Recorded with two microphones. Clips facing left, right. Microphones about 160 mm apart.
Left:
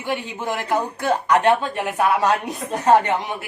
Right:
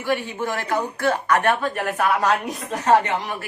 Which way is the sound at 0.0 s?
15° left (ahead or behind).